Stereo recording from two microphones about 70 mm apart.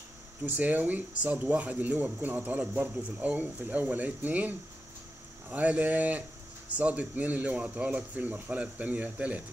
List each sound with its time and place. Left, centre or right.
0.5 s speech: right